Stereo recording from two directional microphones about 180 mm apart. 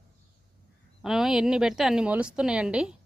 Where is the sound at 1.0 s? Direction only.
Centre (ahead or behind).